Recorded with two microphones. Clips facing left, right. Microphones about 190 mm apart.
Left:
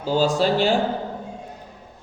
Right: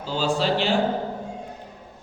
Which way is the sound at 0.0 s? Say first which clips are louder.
Left 4 dB; 45° left (ahead or behind).